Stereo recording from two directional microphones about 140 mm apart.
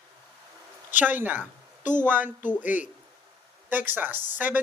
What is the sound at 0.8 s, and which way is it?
A woman's voice, 10° right (ahead or behind).